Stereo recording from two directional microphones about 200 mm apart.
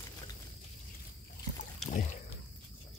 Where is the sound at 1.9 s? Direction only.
35° left (ahead or behind).